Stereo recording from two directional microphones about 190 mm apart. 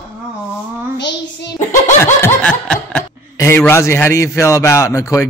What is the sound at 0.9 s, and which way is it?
Child singing, 65° left (ahead or behind).